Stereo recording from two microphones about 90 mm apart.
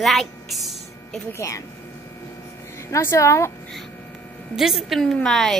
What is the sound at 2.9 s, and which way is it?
Speech, 30° left (ahead or behind).